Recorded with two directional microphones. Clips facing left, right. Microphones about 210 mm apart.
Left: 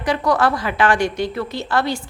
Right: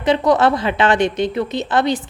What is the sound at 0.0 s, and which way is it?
A woman's voice, 20° right (ahead or behind).